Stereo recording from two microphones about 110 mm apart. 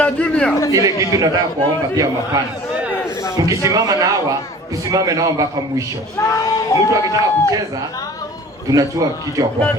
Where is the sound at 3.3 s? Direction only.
30° right (ahead or behind).